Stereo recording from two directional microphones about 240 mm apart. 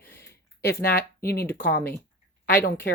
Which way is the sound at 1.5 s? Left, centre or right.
Left.